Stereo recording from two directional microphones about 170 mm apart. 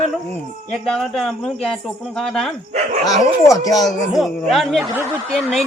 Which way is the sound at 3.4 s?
20° left (ahead or behind).